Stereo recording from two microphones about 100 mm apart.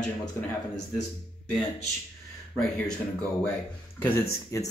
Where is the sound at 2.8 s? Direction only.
10° left (ahead or behind).